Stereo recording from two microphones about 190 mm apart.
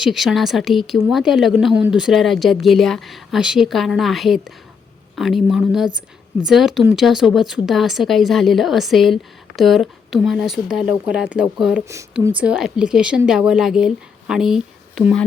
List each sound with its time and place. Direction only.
0.0 s speech: centre (ahead or behind)
11.9 s speech: 15° right (ahead or behind)
12.4 s speech: 5° right (ahead or behind)